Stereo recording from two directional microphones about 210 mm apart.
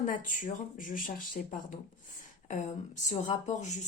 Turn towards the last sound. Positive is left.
turn(degrees=35)  # may be behind; listen again after turning